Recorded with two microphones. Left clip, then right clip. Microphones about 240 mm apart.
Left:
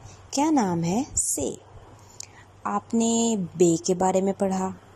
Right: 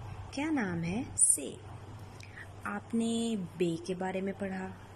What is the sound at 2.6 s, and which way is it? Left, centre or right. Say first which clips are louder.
A woman's voice: left 10 dB; centre.